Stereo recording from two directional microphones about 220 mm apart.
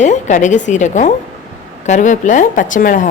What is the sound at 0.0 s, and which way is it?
A woman's voice, 35° left (ahead or behind).